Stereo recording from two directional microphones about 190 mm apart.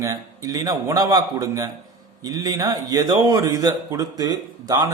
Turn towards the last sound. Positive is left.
turn(degrees=-20)  # may be behind; listen again after turning